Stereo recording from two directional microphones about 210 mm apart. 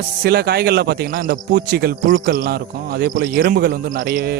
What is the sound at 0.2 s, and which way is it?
A man's voice, 50° right (ahead or behind).